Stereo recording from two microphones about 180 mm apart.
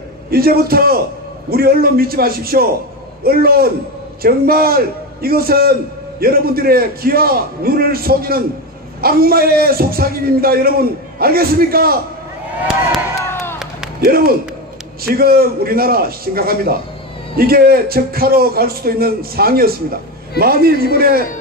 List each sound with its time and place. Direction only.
0.3 s a man's voice: 55° right (ahead or behind)
13.3 s a sound: 15° left (ahead or behind)
14.0 s a man's voice: 55° right (ahead or behind)